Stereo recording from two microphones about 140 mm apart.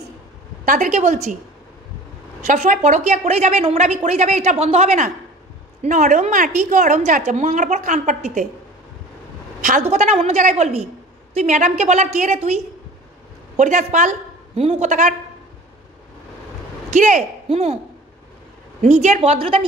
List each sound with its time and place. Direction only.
0.7 s a woman's voice: 65° right (ahead or behind)
2.4 s a woman's voice: 60° right (ahead or behind)
5.9 s a woman's voice: 65° right (ahead or behind)
9.6 s a woman's voice: 60° right (ahead or behind)
13.6 s a woman's voice: 60° right (ahead or behind)
14.5 s a woman's voice: 45° right (ahead or behind); by 15.1 s 65° right (ahead or behind)
16.9 s speech: 60° right (ahead or behind)
18.8 s a woman's voice: 55° right (ahead or behind)
19.3 s speech: 40° right (ahead or behind)